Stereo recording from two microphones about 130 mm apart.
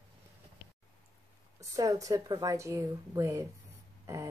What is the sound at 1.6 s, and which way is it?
Speech, 25° right (ahead or behind).